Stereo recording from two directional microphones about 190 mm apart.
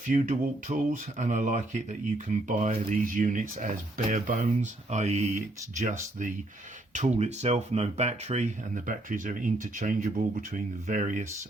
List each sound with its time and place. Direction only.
0.1 s speech: 40° right (ahead or behind)